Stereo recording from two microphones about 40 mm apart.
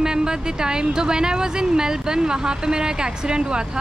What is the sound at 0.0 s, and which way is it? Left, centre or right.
A woman's voice, centre.